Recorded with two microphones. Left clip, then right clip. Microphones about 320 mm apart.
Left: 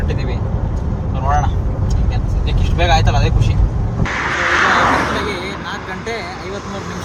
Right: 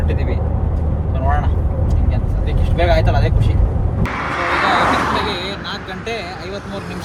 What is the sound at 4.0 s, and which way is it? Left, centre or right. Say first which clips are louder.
Vehicle: left 3 dB; right.